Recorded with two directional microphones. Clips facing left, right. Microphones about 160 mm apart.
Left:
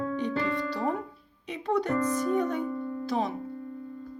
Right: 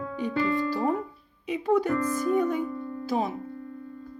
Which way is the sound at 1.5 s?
10° right (ahead or behind).